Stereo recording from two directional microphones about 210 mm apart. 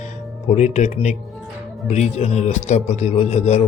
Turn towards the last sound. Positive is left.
turn(degrees=30)  # may be behind; listen again after turning